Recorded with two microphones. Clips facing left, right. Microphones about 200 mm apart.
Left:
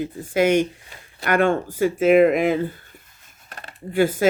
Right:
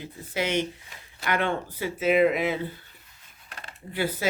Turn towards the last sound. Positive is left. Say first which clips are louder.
# left 10 dB
turn(degrees=50)  # may be behind; listen again after turning